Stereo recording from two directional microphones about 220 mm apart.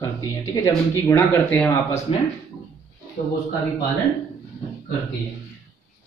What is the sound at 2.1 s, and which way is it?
Speech, 25° left (ahead or behind).